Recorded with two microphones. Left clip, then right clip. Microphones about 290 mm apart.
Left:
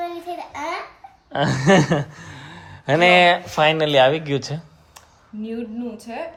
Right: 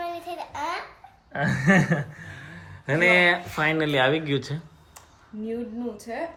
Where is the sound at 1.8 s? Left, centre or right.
Centre.